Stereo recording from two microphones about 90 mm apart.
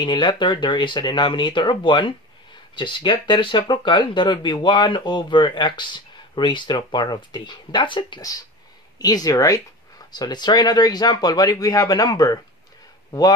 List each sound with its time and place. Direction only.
0.0 s speech: 60° left (ahead or behind)
8.9 s speech: 45° left (ahead or behind)